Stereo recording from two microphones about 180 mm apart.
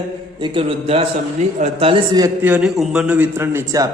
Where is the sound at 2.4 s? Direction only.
5° right (ahead or behind).